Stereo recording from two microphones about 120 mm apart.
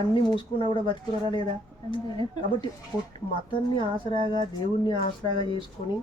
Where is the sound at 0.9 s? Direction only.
40° left (ahead or behind).